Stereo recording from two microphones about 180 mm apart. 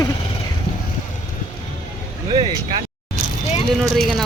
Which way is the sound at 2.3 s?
25° right (ahead or behind).